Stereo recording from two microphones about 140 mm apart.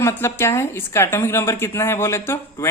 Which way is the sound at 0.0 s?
20° left (ahead or behind).